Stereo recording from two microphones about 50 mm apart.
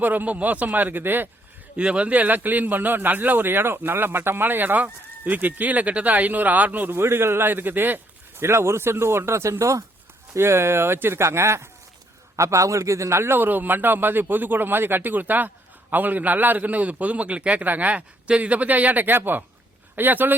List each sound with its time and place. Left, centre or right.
0.0 s a man's voice: right
1.7 s a man's voice: right
6.9 s a man's voice: right
8.4 s speech: right
10.3 s speech: right
12.4 s a man's voice: right